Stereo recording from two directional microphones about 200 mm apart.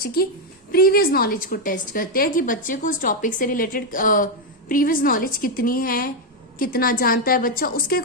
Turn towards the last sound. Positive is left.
turn(degrees=45)  # may be behind; listen again after turning